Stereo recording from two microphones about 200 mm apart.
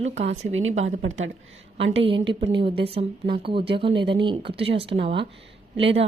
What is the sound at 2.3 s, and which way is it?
Speech, 25° right (ahead or behind).